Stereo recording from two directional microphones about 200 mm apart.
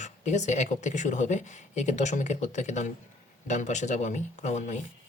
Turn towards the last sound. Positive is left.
turn(degrees=35)  # may be behind; listen again after turning